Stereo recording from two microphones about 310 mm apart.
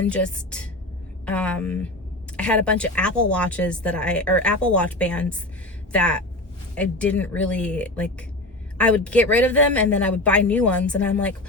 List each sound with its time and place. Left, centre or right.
0.0 s speech: centre